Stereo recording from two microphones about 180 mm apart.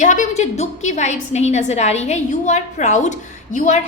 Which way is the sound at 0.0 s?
45° left (ahead or behind).